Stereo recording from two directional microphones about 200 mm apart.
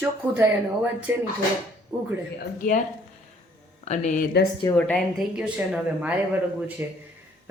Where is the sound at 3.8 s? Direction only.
35° left (ahead or behind).